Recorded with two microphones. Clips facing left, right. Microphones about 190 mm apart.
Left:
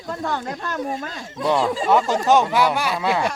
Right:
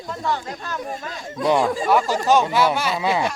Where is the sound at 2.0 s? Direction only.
20° left (ahead or behind).